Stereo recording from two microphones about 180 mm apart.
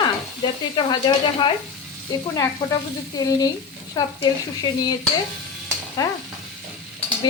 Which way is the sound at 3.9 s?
20° left (ahead or behind).